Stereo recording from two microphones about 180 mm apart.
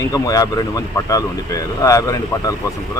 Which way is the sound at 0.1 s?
20° left (ahead or behind).